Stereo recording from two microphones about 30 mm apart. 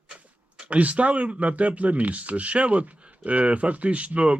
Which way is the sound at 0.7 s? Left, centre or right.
Right.